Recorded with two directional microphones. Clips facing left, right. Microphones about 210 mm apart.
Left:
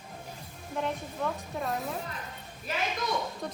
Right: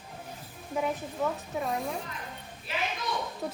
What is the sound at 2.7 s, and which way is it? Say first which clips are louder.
Speech: left 1 dB; 45° left (ahead or behind).